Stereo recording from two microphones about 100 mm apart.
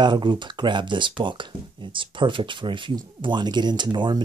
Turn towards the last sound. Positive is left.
turn(degrees=-50)  # may be behind; listen again after turning